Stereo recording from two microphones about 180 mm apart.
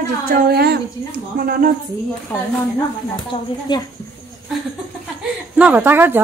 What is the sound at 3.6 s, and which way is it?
Speech, 20° left (ahead or behind).